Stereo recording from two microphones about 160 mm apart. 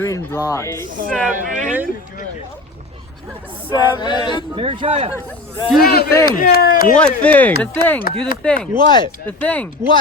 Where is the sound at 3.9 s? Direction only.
30° left (ahead or behind).